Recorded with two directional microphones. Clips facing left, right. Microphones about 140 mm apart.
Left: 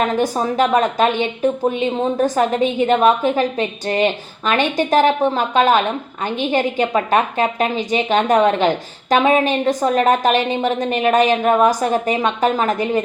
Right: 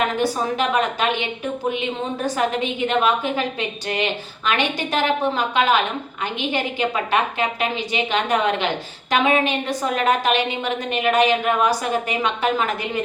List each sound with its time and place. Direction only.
0.2 s a woman's voice: 40° left (ahead or behind)